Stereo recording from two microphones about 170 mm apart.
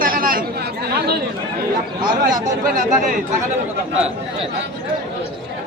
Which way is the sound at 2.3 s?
50° right (ahead or behind).